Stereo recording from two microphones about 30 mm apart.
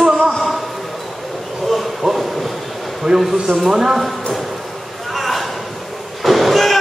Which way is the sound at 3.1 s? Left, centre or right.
Centre.